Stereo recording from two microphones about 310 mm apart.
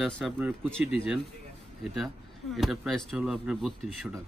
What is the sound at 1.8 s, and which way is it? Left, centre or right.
Speech, centre.